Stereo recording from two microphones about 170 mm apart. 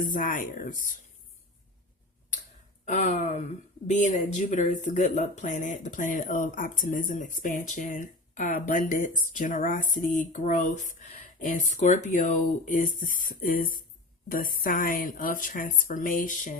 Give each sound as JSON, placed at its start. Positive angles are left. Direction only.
{"t": 0.0, "sound": "speech", "side_deg": 50}
{"t": 2.8, "sound": "speech", "side_deg": 45}